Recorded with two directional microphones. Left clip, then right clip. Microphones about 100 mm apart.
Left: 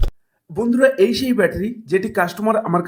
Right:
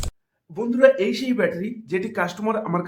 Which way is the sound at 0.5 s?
60° left (ahead or behind).